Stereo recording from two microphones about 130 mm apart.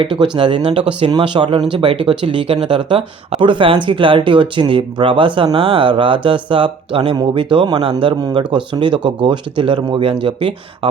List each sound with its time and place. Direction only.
0.0 s speech: 40° right (ahead or behind)